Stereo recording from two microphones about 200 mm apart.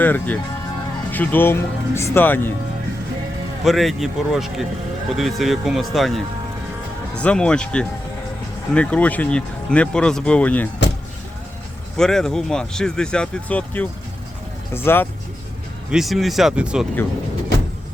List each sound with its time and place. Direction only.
0.0 s speech: 10° left (ahead or behind)
3.6 s speech: centre (ahead or behind)
11.9 s speech: 5° left (ahead or behind)
15.9 s speech: centre (ahead or behind)